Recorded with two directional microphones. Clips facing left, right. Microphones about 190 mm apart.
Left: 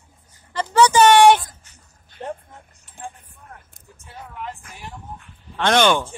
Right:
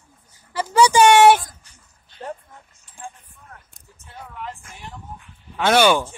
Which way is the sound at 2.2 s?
25° left (ahead or behind).